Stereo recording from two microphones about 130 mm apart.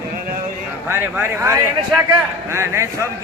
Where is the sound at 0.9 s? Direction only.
15° right (ahead or behind).